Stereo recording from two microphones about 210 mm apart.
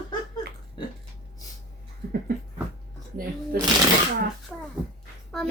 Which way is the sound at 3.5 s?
45° right (ahead or behind).